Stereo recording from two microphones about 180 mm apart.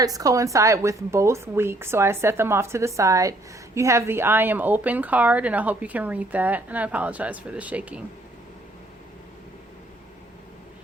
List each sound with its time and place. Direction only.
0.0 s speech: 20° right (ahead or behind)